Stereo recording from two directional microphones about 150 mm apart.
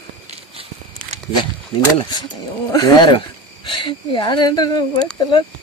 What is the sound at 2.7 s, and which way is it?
Speech, 25° left (ahead or behind).